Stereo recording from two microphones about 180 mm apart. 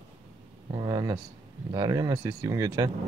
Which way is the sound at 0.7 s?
20° right (ahead or behind).